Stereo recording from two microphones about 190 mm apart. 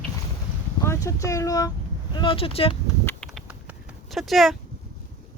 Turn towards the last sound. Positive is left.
turn(degrees=0)  # may be behind; listen again after turning